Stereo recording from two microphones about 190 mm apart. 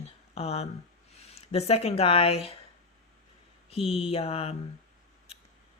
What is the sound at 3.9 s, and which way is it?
Speech, 30° left (ahead or behind).